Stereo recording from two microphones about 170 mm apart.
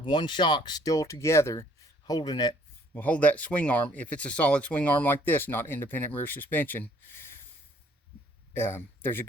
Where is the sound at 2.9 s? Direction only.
10° left (ahead or behind).